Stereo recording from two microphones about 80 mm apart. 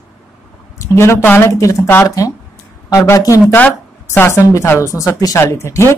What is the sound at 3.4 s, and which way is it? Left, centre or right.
A woman's voice, left.